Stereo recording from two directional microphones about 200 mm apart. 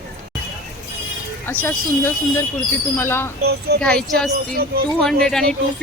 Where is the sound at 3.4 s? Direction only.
55° right (ahead or behind).